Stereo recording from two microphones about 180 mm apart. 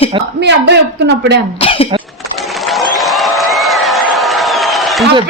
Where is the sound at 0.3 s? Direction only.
80° right.